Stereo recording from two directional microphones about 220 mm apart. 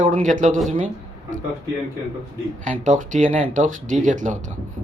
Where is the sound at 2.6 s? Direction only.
35° right (ahead or behind).